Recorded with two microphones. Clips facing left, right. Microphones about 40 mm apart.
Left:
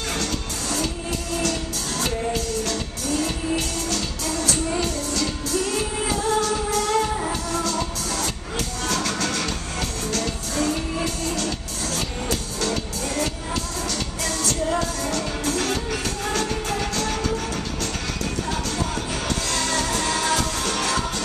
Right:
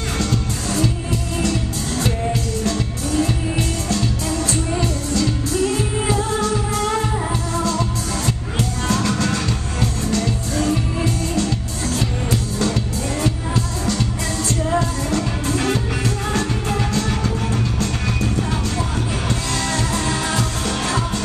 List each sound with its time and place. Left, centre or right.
2.6 s music: right
8.8 s music: right
13.8 s music: right
19.6 s music: right